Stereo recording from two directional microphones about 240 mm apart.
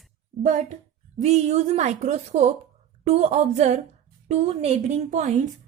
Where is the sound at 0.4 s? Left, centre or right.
Right.